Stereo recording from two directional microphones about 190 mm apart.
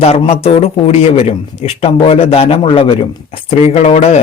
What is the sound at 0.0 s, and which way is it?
A man's voice, 30° left (ahead or behind).